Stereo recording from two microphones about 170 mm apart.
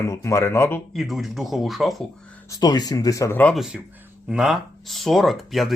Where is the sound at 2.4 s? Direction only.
20° left (ahead or behind).